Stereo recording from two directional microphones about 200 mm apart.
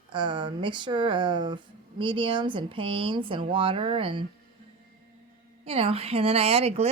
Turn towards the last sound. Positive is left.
turn(degrees=-30)  # may be behind; listen again after turning